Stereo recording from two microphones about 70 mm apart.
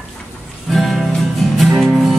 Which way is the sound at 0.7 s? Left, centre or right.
Centre.